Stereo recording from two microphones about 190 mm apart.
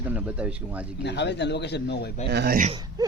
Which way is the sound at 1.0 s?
65° left (ahead or behind).